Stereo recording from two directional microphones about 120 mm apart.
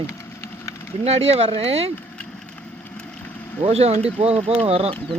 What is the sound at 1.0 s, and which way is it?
Speech, 55° right (ahead or behind).